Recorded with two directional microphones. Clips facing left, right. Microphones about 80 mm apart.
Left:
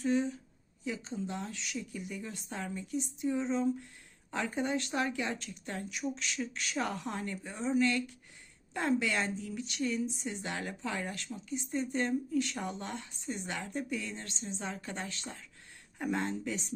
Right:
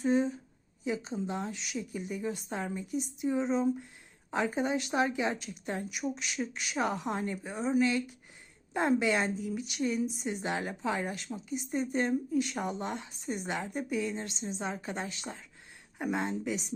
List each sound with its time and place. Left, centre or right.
0.0 s speech: right